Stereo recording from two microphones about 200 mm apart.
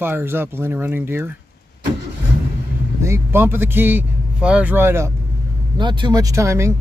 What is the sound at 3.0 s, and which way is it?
Speech, 10° right (ahead or behind).